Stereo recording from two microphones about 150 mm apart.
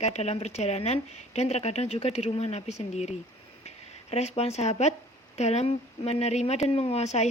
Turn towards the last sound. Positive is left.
turn(degrees=45)  # may be behind; listen again after turning